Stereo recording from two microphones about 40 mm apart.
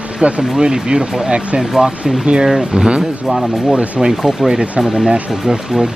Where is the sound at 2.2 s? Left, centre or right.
Right.